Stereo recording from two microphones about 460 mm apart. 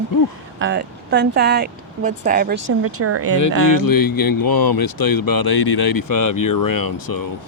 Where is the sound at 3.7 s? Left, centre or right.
Left.